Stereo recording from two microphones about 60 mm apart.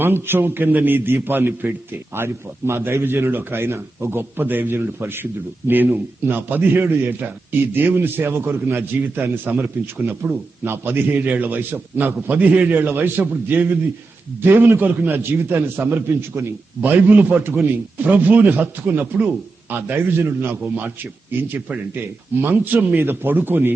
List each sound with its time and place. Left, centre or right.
0.0 s a man's voice: right